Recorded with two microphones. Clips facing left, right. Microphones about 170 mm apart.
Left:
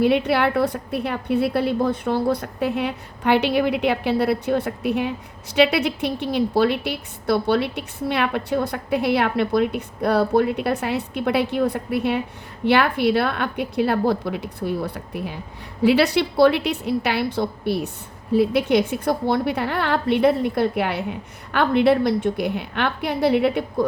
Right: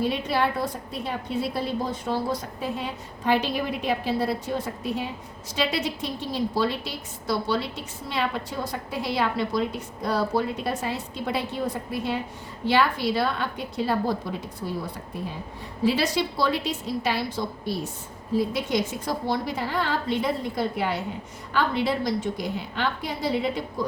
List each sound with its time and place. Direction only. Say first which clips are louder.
0.0 s a woman's voice: left 6 dB; 70° left (ahead or behind)